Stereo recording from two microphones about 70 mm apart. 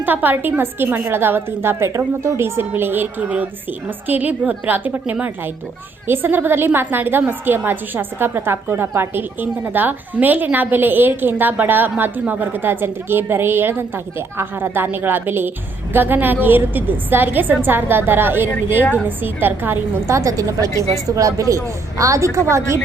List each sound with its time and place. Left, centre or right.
0.0 s a woman's voice: right
20.1 s a woman's voice: right